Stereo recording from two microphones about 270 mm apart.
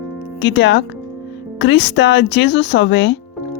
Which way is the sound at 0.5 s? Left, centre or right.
Left.